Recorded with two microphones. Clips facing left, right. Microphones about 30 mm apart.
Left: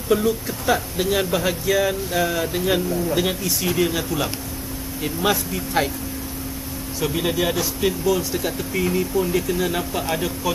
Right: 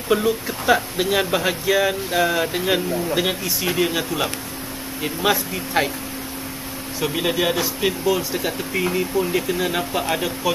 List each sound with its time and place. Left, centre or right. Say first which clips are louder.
0.1 s speech: even; right
7.0 s speech: right 1 dB; centre